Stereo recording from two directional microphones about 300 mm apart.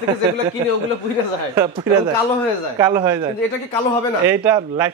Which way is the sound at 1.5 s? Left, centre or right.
Centre.